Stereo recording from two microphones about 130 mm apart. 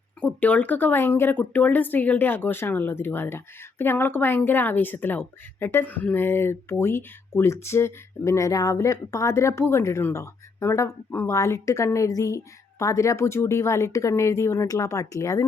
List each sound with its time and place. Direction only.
0.2 s speech: 10° left (ahead or behind)